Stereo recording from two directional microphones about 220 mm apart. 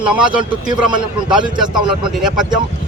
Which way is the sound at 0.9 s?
20° right (ahead or behind).